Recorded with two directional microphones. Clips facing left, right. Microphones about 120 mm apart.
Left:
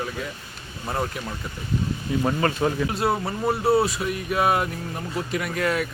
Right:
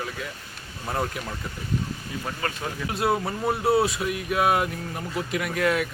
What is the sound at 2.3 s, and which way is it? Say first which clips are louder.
Speech: left 8 dB; 50° left (ahead or behind).